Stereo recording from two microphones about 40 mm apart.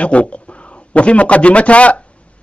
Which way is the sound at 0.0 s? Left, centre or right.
Left.